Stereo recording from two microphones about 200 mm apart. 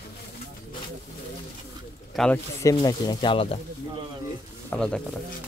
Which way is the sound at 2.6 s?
20° left (ahead or behind).